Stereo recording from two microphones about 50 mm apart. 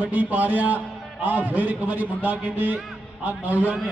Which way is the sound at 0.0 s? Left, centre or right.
Right.